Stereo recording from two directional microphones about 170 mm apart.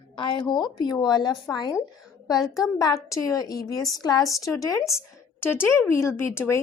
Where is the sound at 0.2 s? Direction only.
25° left (ahead or behind).